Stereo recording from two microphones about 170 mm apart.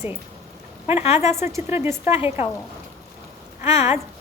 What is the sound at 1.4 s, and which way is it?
Speech, 15° right (ahead or behind).